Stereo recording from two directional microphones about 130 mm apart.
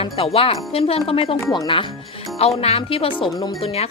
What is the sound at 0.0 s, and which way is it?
Speech, 50° left (ahead or behind).